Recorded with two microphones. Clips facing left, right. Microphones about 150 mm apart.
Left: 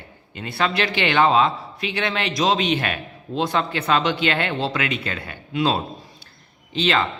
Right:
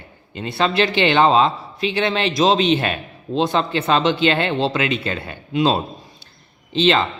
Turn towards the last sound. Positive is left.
turn(degrees=-25)  # may be behind; listen again after turning